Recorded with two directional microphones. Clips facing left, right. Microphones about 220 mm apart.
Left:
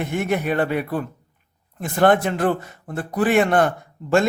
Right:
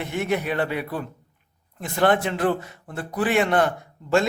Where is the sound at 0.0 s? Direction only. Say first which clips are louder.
Left 2 dB; 50° left (ahead or behind).